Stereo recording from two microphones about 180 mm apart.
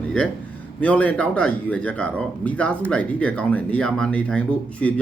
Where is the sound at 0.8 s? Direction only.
10° left (ahead or behind).